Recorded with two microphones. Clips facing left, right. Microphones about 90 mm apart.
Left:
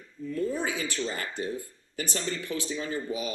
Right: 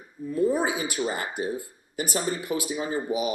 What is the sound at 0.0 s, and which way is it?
Speech, 25° right (ahead or behind).